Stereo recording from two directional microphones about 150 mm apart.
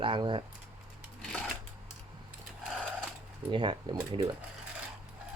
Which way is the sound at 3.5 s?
35° right (ahead or behind).